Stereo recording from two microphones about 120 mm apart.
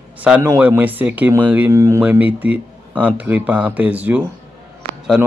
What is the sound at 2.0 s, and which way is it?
Speech, 15° right (ahead or behind).